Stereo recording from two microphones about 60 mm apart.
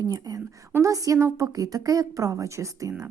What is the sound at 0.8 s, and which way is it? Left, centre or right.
A woman's voice, right.